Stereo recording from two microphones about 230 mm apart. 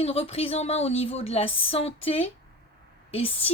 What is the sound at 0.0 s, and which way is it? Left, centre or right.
A woman's voice, left.